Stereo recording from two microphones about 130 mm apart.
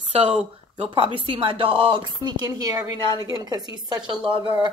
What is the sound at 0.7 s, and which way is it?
A woman's voice, 40° right (ahead or behind).